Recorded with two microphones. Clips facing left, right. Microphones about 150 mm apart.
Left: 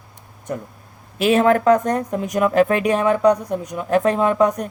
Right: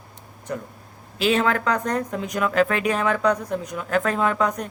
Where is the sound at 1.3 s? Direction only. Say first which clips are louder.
Left 7 dB; 40° left (ahead or behind).